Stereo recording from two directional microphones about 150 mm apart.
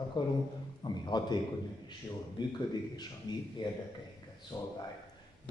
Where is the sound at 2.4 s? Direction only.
30° left (ahead or behind).